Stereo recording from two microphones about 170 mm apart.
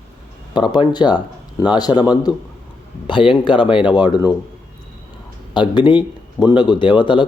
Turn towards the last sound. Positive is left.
turn(degrees=30)  # may be behind; listen again after turning